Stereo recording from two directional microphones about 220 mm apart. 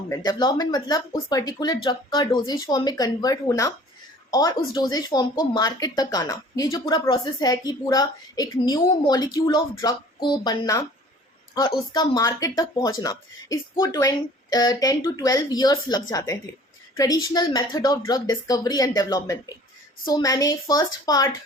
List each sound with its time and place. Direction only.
0.1 s speech: 15° left (ahead or behind)
11.9 s speech: 15° left (ahead or behind)